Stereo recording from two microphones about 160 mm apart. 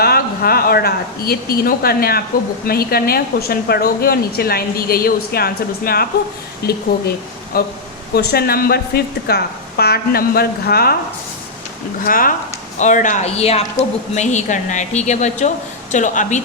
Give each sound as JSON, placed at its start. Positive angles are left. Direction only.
{"t": 0.0, "sound": "a woman's voice", "side_deg": 75}
{"t": 6.6, "sound": "a woman's voice", "side_deg": 85}
{"t": 7.5, "sound": "a woman's voice", "side_deg": 70}
{"t": 8.1, "sound": "a woman's voice", "side_deg": 85}
{"t": 12.0, "sound": "speech", "side_deg": 60}